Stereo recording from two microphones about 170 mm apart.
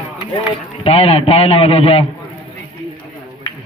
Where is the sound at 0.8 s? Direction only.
35° left (ahead or behind).